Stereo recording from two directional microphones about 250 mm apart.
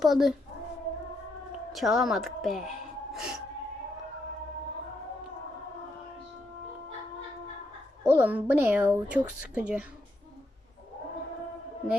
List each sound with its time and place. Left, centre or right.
0.0 s speech: centre
1.7 s speech: centre
3.1 s music: centre
8.1 s a woman's voice: centre